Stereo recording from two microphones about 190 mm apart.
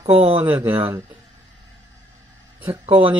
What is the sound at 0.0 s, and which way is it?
Speech, 30° right (ahead or behind).